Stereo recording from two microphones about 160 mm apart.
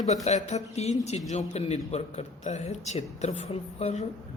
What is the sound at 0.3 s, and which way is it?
A man's voice, 45° left (ahead or behind).